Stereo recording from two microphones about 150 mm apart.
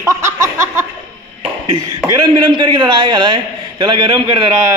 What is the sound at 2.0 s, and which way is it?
A man's voice, 30° right (ahead or behind).